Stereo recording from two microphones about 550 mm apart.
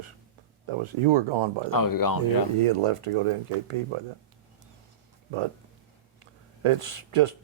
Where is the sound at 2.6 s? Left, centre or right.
Right.